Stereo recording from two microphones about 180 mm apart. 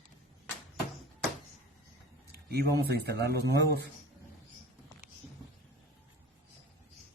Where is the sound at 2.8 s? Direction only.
65° right (ahead or behind).